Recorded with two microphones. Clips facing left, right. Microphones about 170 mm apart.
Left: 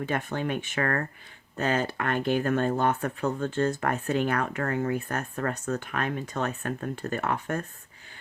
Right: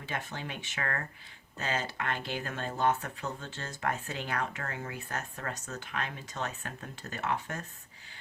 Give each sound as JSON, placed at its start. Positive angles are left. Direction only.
{"t": 0.0, "sound": "speech", "side_deg": 55}